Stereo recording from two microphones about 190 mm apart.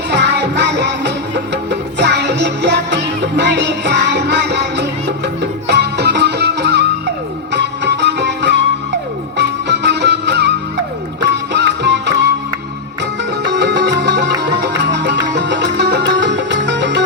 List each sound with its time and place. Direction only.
0.1 s music: 65° right (ahead or behind)
13.4 s music: 65° right (ahead or behind)